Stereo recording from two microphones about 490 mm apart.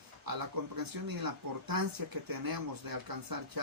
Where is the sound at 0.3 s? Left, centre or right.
Right.